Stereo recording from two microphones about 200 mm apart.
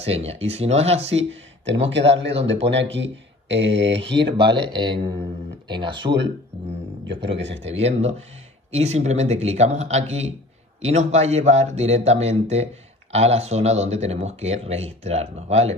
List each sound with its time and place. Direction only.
0.0 s speech: 30° right (ahead or behind)
1.3 s speech: 65° right (ahead or behind)
4.4 s speech: 25° right (ahead or behind)
7.3 s speech: 65° right (ahead or behind)
7.7 s speech: 30° right (ahead or behind)